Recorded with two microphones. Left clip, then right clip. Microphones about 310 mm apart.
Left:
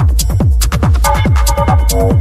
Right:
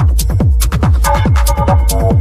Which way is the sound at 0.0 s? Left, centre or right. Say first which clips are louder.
Left 1 dB; centre.